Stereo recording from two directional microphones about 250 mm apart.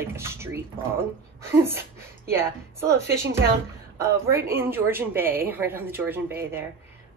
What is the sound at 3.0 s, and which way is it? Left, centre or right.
Speech, right.